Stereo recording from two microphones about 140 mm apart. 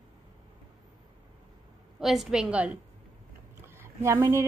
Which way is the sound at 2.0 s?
Centre (ahead or behind).